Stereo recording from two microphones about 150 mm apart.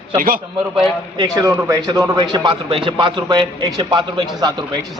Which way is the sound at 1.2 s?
20° right (ahead or behind).